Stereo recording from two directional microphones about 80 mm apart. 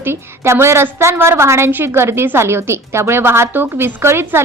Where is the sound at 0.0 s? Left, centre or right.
Right.